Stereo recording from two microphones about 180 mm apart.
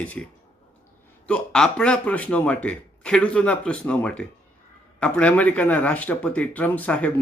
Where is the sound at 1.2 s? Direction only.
5° left (ahead or behind).